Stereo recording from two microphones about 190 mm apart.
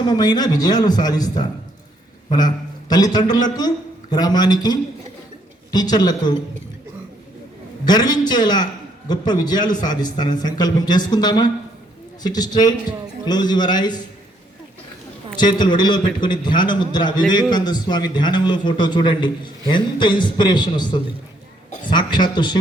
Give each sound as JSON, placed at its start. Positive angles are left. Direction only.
{"t": 0.0, "sound": "a man's voice", "side_deg": 20}
{"t": 2.9, "sound": "a man's voice", "side_deg": 20}
{"t": 7.9, "sound": "a man's voice", "side_deg": 20}
{"t": 15.4, "sound": "a man's voice", "side_deg": 20}